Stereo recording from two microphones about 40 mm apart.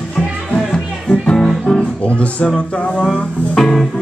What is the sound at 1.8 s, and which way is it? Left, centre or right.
Music, left.